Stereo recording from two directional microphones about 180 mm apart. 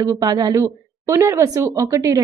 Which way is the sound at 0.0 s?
20° right (ahead or behind).